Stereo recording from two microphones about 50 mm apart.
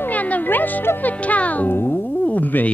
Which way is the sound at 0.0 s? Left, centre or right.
Left.